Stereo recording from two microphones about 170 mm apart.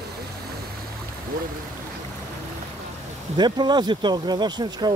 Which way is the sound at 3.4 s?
25° right (ahead or behind).